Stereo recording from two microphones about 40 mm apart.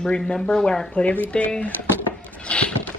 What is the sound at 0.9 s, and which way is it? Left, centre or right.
Speech, left.